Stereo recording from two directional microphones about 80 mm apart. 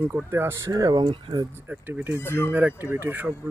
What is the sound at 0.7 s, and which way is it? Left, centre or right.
Speech, right.